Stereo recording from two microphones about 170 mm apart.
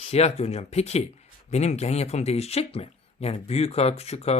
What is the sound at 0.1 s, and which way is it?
Speech, 40° left (ahead or behind).